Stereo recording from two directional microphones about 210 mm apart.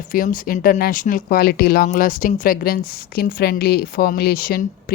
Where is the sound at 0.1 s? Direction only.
40° left (ahead or behind).